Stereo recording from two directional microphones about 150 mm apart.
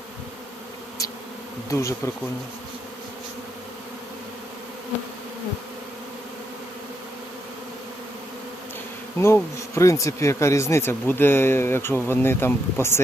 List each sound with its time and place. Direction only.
1.7 s bee: 20° left (ahead or behind)
9.1 s speech: 20° left (ahead or behind)